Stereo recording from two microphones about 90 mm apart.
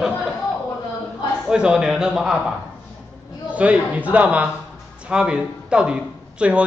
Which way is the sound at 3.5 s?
15° right (ahead or behind).